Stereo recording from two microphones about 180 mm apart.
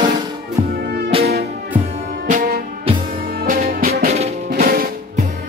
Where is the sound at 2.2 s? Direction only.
50° right (ahead or behind).